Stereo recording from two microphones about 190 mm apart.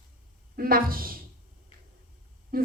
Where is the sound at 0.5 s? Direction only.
50° right (ahead or behind).